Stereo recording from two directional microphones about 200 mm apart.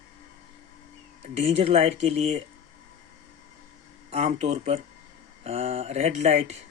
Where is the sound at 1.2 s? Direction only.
30° right (ahead or behind).